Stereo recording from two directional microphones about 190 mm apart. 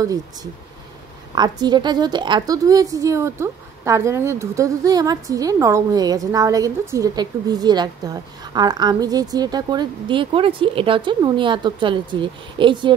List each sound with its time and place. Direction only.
1.3 s a woman's voice: 20° right (ahead or behind)